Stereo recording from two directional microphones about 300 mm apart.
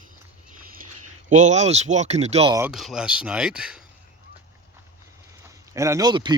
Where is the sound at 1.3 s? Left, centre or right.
Right; by 3.8 s centre.